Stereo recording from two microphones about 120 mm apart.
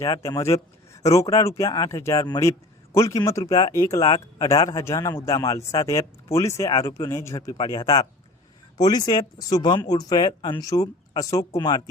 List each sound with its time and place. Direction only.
0.0 s a man's voice: 25° left (ahead or behind)